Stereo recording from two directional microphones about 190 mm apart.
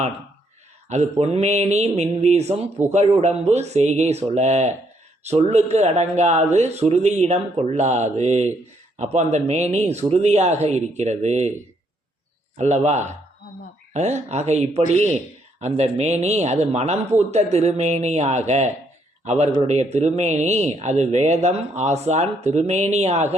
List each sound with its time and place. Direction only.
1.2 s speech: 35° right (ahead or behind)
12.5 s speech: 35° right (ahead or behind)